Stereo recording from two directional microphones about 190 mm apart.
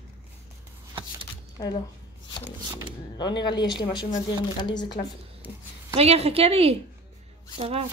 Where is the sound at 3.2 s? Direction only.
20° left (ahead or behind).